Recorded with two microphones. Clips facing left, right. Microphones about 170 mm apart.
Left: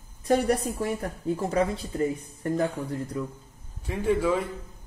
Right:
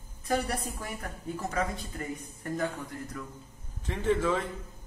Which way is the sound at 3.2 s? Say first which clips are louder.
Left 11 dB; 25° left (ahead or behind).